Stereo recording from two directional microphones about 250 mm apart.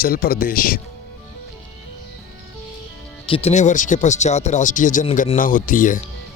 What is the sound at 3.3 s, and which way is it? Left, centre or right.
Speech, left.